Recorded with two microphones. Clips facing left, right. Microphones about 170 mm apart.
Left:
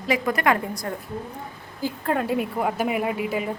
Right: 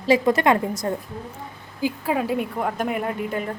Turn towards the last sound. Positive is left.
turn(degrees=5)  # may be behind; listen again after turning